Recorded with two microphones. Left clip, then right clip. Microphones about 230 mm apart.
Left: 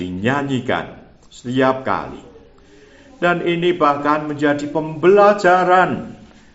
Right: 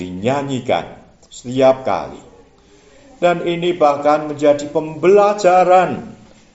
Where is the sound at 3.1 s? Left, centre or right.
Centre.